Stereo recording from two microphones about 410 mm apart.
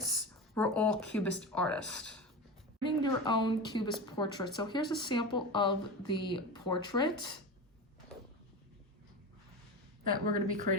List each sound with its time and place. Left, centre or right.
0.5 s speech: centre
10.1 s a woman's voice: centre